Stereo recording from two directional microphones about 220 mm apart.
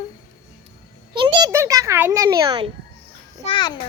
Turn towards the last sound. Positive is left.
turn(degrees=20)  # may be behind; listen again after turning